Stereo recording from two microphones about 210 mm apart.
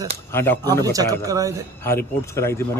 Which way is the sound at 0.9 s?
15° right (ahead or behind).